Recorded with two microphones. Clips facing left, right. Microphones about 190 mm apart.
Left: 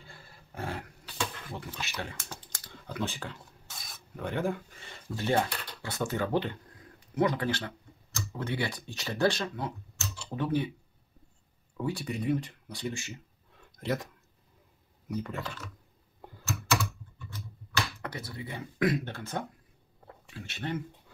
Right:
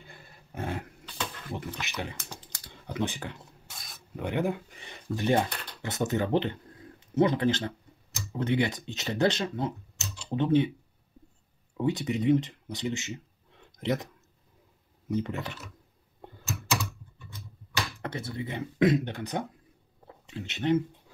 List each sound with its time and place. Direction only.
0.0 s dog: 20° right (ahead or behind)
1.5 s speech: 15° right (ahead or behind)
3.7 s filing: centre (ahead or behind)
4.2 s speech: 15° right (ahead or behind)
11.7 s speech: 20° right (ahead or behind)
13.7 s a sound: 20° right (ahead or behind)
15.0 s speech: 20° right (ahead or behind)
17.3 s a sound: 25° right (ahead or behind)
20.2 s speech: 20° right (ahead or behind)